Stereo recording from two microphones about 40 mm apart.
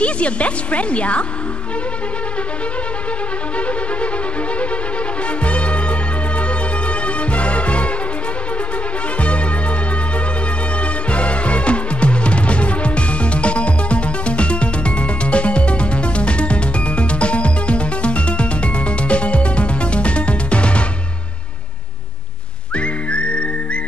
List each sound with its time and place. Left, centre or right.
0.0 s speech: left
3.5 s music: left
5.4 s music: left
10.8 s music: left
22.8 s whistling: left